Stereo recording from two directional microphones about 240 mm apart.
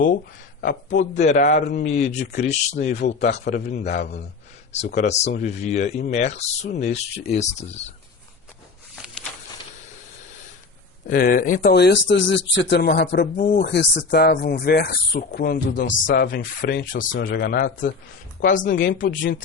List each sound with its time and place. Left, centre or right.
0.6 s a man's voice: left
3.9 s speech: left
4.7 s speech: left
11.0 s speech: left
13.3 s speech: left
13.7 s speech: left